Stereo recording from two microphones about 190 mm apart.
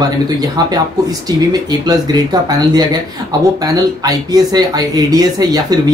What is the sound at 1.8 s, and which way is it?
Speech, 20° right (ahead or behind).